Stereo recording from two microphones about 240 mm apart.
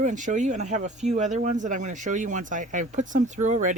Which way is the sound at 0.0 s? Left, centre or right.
Right.